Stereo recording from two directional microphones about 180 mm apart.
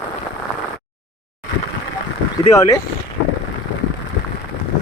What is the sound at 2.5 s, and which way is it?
Speech, 15° left (ahead or behind).